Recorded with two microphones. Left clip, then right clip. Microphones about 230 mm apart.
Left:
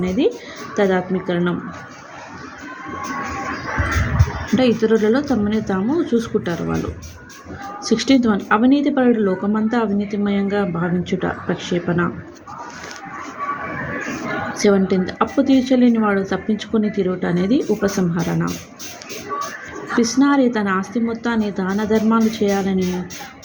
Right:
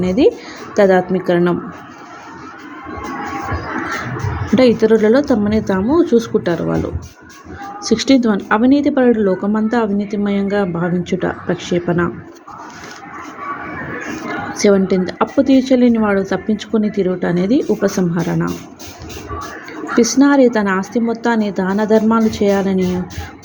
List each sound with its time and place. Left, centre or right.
0.8 s a woman's voice: right
4.5 s a woman's voice: centre
7.9 s a woman's voice: centre
14.5 s a woman's voice: centre
20.0 s a woman's voice: centre